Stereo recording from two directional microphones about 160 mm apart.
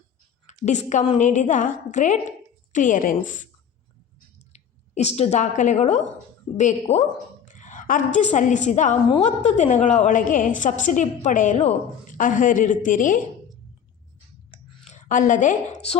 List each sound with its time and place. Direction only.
0.6 s a woman's voice: 45° left (ahead or behind)
4.4 s drip: 45° left (ahead or behind)
6.6 s a woman's voice: 45° left (ahead or behind)
14.8 s a woman's voice: 50° left (ahead or behind)